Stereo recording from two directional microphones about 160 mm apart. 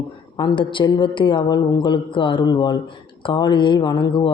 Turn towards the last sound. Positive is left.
turn(degrees=30)  # may be behind; listen again after turning